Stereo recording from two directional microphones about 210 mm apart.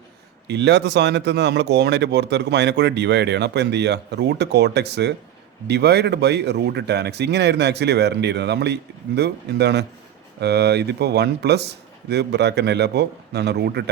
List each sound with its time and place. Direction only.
0.4 s speech: 55° right (ahead or behind)